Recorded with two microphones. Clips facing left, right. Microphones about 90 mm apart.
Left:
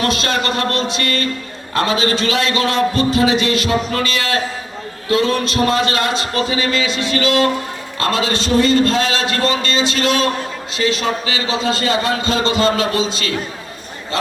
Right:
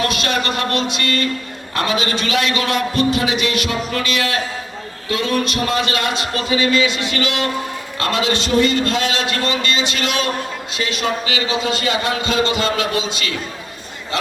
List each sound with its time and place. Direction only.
0.0 s music: 30° left (ahead or behind)
1.7 s a man's voice: 30° left (ahead or behind)